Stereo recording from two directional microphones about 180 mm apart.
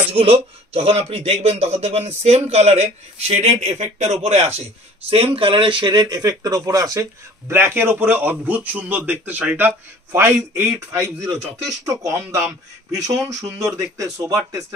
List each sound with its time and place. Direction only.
0.1 s speech: 35° right (ahead or behind)